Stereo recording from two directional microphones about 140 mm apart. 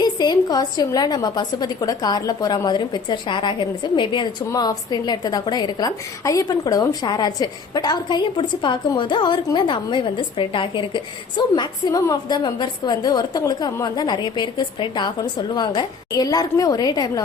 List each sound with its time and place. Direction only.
0.0 s a woman's voice: 30° left (ahead or behind)